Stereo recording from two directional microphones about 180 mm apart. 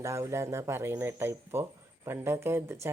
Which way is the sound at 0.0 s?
15° right (ahead or behind).